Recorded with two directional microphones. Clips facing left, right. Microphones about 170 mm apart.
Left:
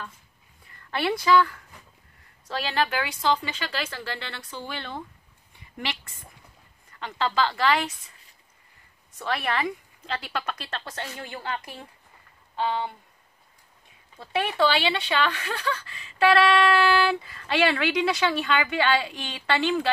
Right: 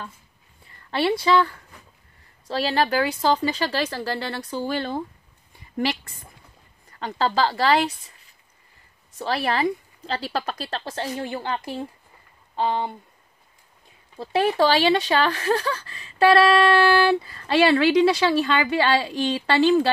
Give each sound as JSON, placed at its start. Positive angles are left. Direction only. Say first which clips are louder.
{"t": 0.8, "sound": "speech", "louder": "right 3 dB", "side_deg": -30}
{"t": 6.9, "sound": "speech", "louder": "right 4 dB", "side_deg": -40}
{"t": 9.2, "sound": "speech", "louder": "right 4 dB", "side_deg": -35}
{"t": 14.1, "sound": "speech", "louder": "right 6 dB", "side_deg": -35}